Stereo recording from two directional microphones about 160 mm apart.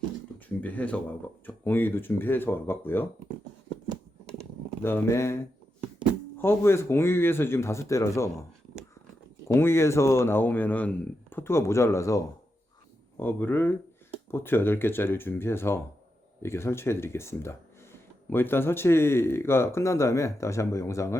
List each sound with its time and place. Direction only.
0.3 s speech: 10° left (ahead or behind)
4.8 s speech: 15° left (ahead or behind)
6.4 s speech: 15° left (ahead or behind)
9.5 s speech: 15° left (ahead or behind)